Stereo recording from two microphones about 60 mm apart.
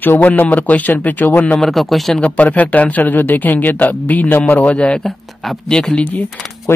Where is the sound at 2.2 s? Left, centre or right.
Left.